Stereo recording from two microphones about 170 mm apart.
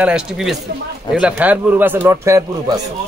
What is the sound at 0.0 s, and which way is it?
A man's voice, 5° right (ahead or behind).